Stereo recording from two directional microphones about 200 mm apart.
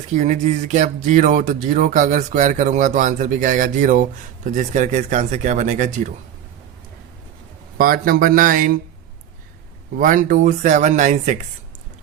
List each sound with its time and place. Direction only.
0.1 s speech: 35° right (ahead or behind)
7.8 s speech: 45° right (ahead or behind)
10.0 s speech: 40° right (ahead or behind)